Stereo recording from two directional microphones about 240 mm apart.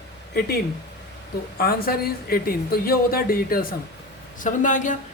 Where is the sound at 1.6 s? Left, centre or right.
Left.